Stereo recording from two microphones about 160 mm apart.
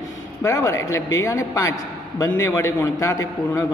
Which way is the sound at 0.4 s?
20° left (ahead or behind).